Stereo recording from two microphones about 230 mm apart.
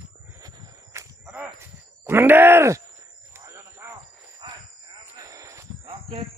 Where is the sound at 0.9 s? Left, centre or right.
Centre.